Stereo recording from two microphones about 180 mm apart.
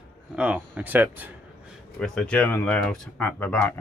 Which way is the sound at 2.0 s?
5° left (ahead or behind).